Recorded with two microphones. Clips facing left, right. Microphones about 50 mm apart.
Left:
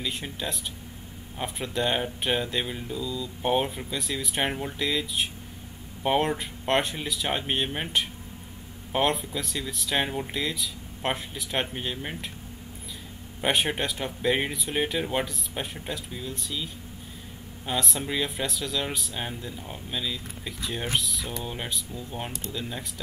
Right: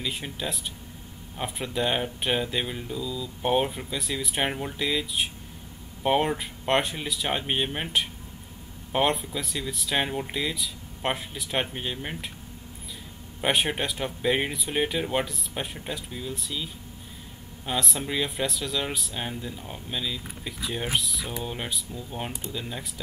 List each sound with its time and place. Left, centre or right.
0.0 s speech: centre
13.4 s speech: centre